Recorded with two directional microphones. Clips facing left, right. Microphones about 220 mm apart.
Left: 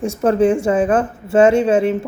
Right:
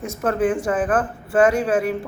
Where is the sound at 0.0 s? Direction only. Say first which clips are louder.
Left 6 dB; 30° left (ahead or behind).